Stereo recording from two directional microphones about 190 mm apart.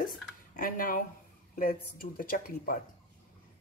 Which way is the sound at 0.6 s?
45° left (ahead or behind).